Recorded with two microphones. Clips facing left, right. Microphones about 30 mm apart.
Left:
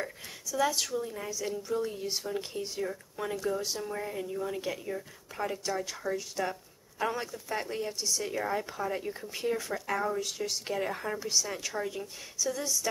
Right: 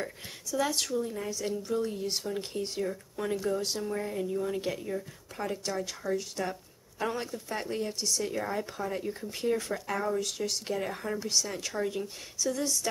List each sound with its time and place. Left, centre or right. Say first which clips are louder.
0.6 s speech: left 1 dB; centre
0.8 s speech: right 2 dB; centre
1.7 s speech: right 1 dB; centre
2.2 s speech: right 1 dB; centre
10.7 s speech: even; centre
11.1 s speech: even; centre